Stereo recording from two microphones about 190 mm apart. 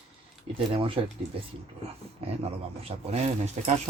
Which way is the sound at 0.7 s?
25° right (ahead or behind).